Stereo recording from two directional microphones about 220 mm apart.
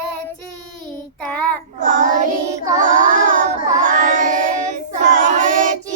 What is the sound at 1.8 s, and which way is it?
Child singing, 35° right (ahead or behind).